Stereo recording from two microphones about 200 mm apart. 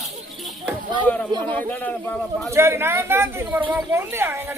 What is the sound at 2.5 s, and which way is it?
Speech, 15° right (ahead or behind).